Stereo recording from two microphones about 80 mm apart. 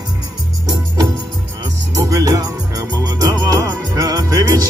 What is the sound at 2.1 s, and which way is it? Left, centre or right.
Music, right.